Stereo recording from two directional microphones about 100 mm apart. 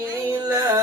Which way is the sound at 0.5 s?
30° right (ahead or behind).